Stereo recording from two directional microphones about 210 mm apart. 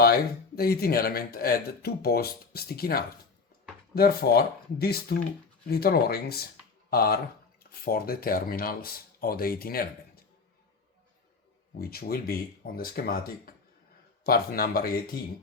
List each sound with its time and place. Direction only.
0.0 s speech: 45° left (ahead or behind)
11.8 s speech: 45° left (ahead or behind)